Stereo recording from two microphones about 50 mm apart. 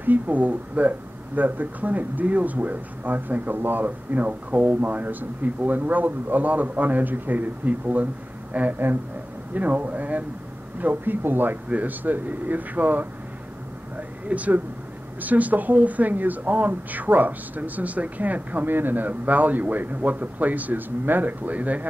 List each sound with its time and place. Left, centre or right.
0.0 s speech: right
13.9 s a sound: right
15.1 s speech: right